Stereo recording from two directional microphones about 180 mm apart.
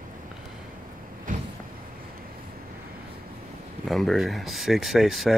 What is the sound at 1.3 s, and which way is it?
Vehicle, 45° right (ahead or behind).